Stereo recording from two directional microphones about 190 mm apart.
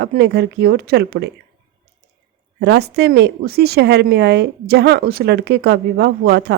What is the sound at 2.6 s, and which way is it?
Speech, 60° right (ahead or behind).